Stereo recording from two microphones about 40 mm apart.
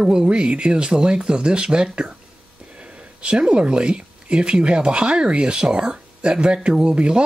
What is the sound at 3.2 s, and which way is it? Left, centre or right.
Speech, right.